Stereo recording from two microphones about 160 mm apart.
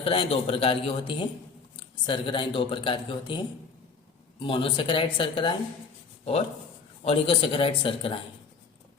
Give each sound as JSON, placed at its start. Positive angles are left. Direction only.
{"t": 0.0, "sound": "speech", "side_deg": 35}
{"t": 7.0, "sound": "speech", "side_deg": 35}